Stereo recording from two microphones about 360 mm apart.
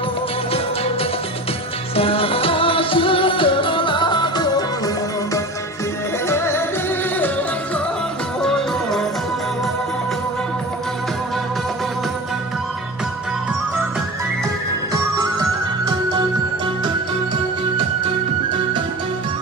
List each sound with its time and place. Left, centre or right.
2.0 s music: centre
6.2 s music: centre
8.4 s music: centre